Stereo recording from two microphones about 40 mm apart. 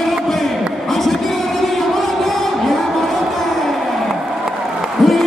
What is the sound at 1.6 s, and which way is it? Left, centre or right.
Music, centre.